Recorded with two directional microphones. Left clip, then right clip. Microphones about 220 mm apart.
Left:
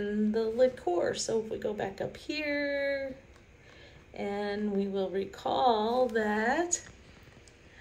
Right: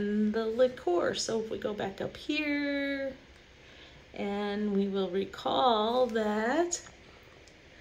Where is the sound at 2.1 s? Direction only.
10° right (ahead or behind).